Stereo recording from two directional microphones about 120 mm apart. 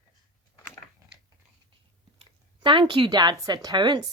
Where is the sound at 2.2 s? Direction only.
45° right (ahead or behind).